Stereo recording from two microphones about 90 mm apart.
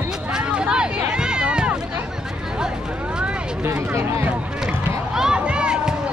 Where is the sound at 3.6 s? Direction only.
30° right (ahead or behind).